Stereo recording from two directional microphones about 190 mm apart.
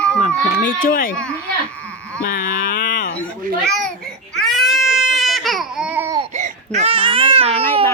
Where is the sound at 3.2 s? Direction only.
Centre (ahead or behind).